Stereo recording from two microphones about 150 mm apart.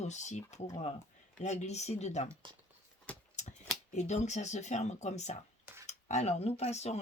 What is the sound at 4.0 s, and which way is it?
Speech, 50° left (ahead or behind).